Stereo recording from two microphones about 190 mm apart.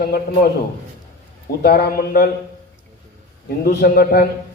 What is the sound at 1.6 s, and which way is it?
Speech, 55° left (ahead or behind).